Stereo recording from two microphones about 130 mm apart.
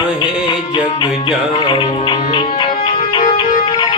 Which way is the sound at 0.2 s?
35° left (ahead or behind).